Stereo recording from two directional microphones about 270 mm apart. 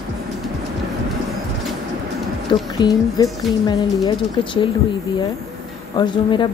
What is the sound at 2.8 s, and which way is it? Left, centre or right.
A woman's voice, centre.